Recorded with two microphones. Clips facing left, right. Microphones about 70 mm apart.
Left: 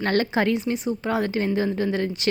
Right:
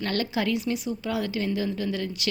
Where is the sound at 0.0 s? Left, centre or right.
Left.